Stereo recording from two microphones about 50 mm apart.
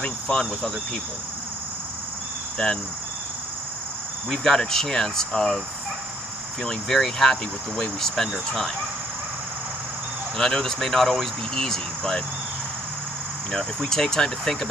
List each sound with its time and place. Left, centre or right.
0.0 s cricket: centre
2.5 s cricket: centre
4.3 s cricket: centre
6.9 s speech: centre
7.8 s cricket: centre
10.3 s cricket: centre
13.5 s cricket: centre